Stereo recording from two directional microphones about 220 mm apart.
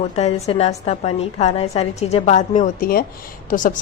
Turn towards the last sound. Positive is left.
turn(degrees=40)  # may be behind; listen again after turning